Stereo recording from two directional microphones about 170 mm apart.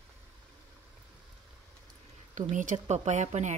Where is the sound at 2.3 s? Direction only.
50° right (ahead or behind).